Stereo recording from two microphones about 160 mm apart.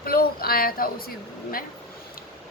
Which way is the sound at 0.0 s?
70° left (ahead or behind).